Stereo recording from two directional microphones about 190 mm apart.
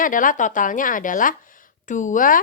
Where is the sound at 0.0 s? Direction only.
45° left (ahead or behind).